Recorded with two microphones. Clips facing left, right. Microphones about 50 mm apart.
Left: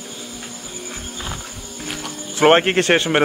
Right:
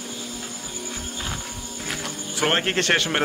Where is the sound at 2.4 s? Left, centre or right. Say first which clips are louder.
Left 9 dB; left.